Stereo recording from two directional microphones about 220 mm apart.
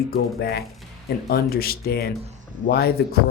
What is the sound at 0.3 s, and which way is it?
Speech, 45° left (ahead or behind).